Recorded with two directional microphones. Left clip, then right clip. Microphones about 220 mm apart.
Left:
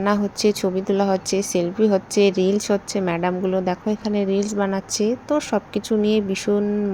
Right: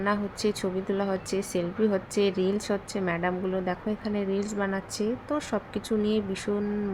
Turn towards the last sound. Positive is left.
turn(degrees=20)  # may be behind; listen again after turning